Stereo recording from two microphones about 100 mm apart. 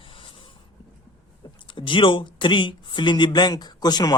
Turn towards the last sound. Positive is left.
turn(degrees=45)  # may be behind; listen again after turning